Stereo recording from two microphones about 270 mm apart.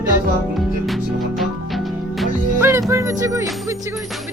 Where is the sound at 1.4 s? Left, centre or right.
Centre.